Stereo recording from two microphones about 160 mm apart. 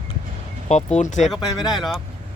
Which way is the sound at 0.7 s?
45° left (ahead or behind).